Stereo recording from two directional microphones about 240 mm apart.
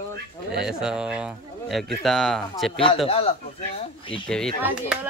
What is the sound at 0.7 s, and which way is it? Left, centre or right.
Speech, centre.